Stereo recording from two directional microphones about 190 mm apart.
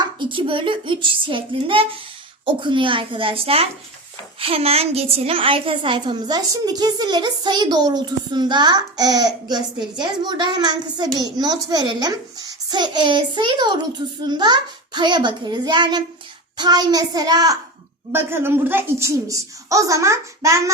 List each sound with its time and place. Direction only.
0.0 s a woman's voice: 25° right (ahead or behind)